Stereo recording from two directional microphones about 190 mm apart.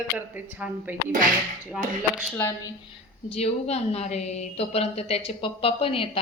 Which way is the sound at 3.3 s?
35° left (ahead or behind).